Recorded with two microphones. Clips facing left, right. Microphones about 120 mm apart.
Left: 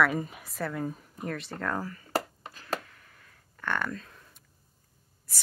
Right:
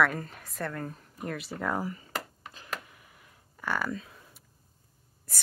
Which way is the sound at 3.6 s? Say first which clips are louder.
Even; 5° right (ahead or behind).